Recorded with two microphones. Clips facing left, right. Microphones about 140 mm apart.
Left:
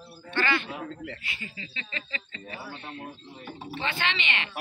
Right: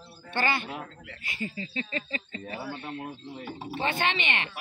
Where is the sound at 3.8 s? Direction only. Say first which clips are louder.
Right 3 dB; 45° right (ahead or behind).